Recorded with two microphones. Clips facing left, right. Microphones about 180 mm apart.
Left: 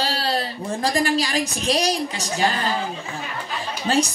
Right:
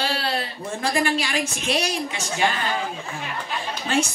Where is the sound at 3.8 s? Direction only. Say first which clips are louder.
Left 3 dB; 35° left (ahead or behind).